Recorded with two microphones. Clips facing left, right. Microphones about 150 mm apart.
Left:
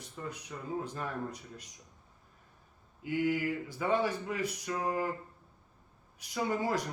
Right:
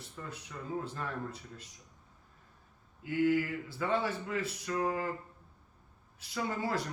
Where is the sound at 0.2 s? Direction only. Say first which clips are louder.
Left 3 dB; 15° left (ahead or behind).